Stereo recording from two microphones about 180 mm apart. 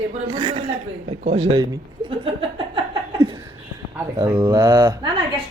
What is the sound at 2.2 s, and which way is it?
Chuckle, 30° right (ahead or behind).